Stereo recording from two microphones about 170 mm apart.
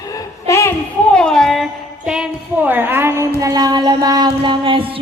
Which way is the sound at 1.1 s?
5° left (ahead or behind).